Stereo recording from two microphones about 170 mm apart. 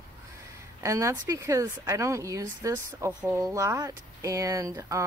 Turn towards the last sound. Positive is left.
turn(degrees=-20)  # may be behind; listen again after turning